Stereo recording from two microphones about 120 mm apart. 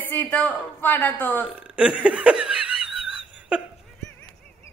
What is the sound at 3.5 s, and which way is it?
Dog, 10° right (ahead or behind).